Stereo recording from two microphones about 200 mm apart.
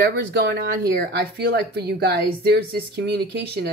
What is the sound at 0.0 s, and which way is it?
Speech, 60° right (ahead or behind).